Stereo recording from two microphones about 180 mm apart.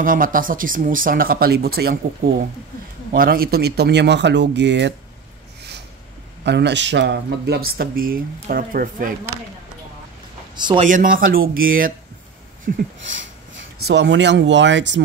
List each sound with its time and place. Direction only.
0.0 s speech: 50° right (ahead or behind); by 4.9 s 75° right (ahead or behind)
6.4 s speech: 70° right (ahead or behind); by 9.1 s 50° right (ahead or behind)
10.5 s a sound: 25° right (ahead or behind)
10.8 s speech: 45° right (ahead or behind)
13.8 s speech: 70° right (ahead or behind)